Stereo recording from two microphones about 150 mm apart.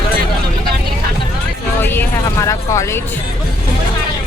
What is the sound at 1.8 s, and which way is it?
Speech, 15° left (ahead or behind).